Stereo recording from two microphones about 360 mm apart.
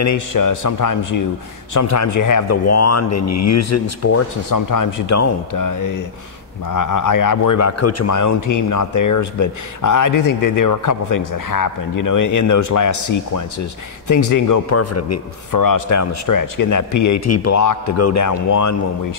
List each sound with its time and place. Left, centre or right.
0.0 s a man's voice: left
4.5 s a man's voice: left
15.5 s speech: left